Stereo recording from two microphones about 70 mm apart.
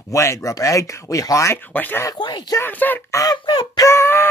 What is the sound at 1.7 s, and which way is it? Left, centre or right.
Speech, left.